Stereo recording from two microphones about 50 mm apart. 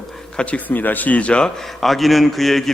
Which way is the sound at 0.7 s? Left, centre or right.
Left.